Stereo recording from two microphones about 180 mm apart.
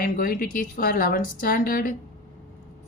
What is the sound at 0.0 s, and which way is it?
A woman's voice, 50° left (ahead or behind).